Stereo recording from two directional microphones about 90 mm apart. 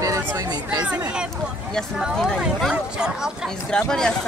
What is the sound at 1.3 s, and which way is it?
Speech, 5° left (ahead or behind).